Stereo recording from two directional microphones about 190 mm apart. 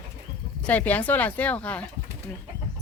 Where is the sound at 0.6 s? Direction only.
10° left (ahead or behind).